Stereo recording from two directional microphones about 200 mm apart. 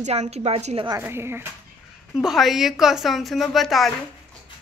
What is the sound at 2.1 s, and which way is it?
A woman's voice, centre (ahead or behind).